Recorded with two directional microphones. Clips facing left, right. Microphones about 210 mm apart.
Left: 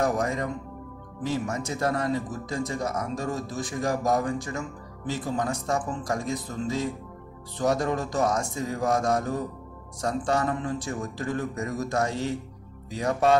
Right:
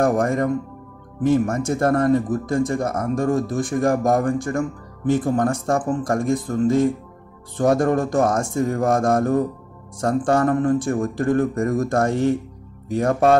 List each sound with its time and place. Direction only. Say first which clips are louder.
0.0 s speech: right 7 dB; 50° right (ahead or behind)